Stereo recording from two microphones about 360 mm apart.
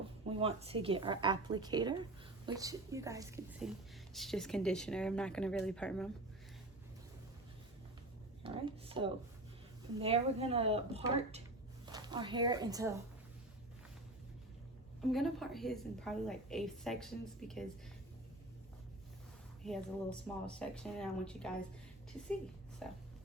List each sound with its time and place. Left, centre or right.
0.3 s a woman's voice: centre
8.4 s a woman's voice: centre
15.1 s a woman's voice: centre
19.6 s a woman's voice: centre
22.8 s a woman's voice: centre